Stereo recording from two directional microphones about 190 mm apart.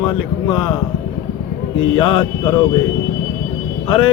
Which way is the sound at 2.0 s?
25° left (ahead or behind).